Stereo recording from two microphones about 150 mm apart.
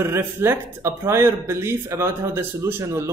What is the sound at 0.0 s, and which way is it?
Speech, 15° right (ahead or behind).